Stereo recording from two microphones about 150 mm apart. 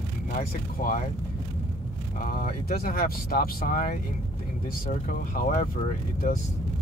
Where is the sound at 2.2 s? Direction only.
70° left (ahead or behind).